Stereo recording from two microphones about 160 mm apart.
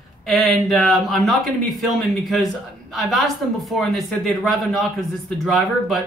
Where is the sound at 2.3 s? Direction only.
Centre (ahead or behind).